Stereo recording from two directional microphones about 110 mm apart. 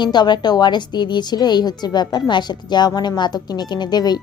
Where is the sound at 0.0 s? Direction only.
40° left (ahead or behind).